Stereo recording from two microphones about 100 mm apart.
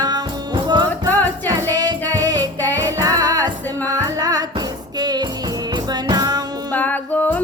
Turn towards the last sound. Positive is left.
turn(degrees=15)  # may be behind; listen again after turning